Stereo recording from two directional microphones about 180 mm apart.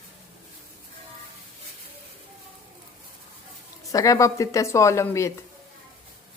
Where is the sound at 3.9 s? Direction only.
20° left (ahead or behind).